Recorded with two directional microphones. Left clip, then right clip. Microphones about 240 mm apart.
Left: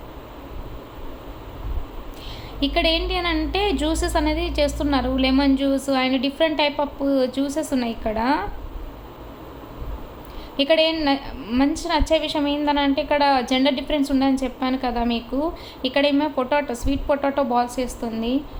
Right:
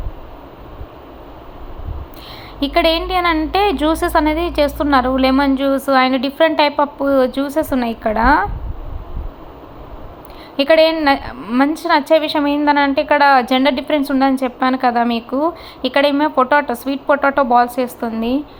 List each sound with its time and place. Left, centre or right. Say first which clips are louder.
2.6 s a woman's voice: right 6 dB; centre
10.6 s a woman's voice: right 7 dB; centre